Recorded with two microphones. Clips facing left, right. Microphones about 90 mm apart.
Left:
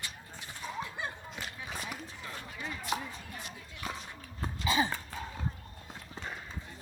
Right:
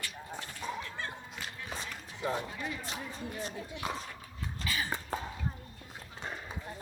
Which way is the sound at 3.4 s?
35° right (ahead or behind).